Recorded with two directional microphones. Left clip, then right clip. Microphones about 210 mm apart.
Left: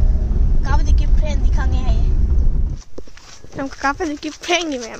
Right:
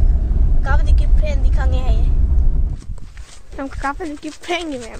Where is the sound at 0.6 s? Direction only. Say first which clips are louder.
Right 1 dB; 10° right (ahead or behind).